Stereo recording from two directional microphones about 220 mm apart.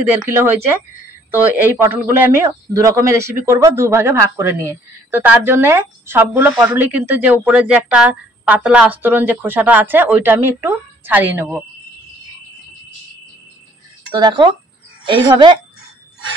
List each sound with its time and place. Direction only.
0.3 s speech: 10° right (ahead or behind)
14.1 s a woman's voice: 20° right (ahead or behind)